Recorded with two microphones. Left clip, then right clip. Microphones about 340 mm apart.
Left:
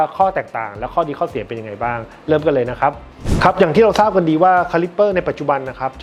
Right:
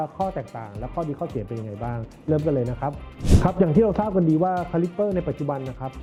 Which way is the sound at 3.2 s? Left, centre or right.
Centre.